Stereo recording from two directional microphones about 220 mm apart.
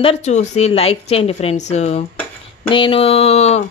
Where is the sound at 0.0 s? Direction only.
30° left (ahead or behind).